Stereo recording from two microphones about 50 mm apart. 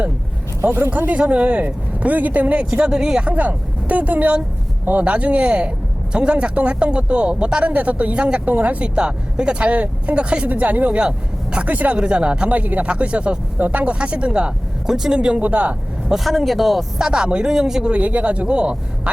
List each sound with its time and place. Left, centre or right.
0.9 s speech: right
1.2 s speech: right
3.2 s speech: right
9.0 s speech: centre
11.9 s speech: centre
15.4 s speech: right
16.2 s speech: centre
17.0 s speech: centre
17.9 s speech: right